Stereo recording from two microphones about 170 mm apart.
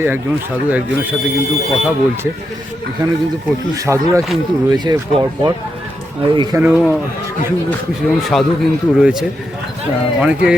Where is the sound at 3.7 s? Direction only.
20° right (ahead or behind).